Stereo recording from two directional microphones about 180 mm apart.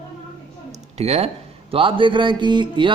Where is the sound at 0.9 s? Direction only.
35° right (ahead or behind).